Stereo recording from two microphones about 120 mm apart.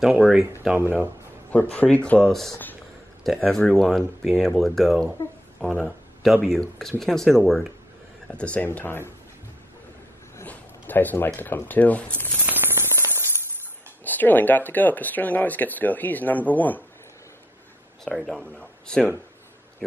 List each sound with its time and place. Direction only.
0.0 s speech: 10° right (ahead or behind)
1.5 s speech: 15° left (ahead or behind)
5.6 s a sound: centre (ahead or behind)
6.4 s speech: 5° left (ahead or behind)
10.3 s speech: 15° left (ahead or behind)
12.4 s a sound: 20° right (ahead or behind)
14.0 s speech: 15° left (ahead or behind)
18.0 s speech: centre (ahead or behind)